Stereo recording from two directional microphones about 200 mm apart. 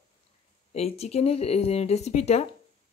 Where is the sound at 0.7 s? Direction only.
30° left (ahead or behind).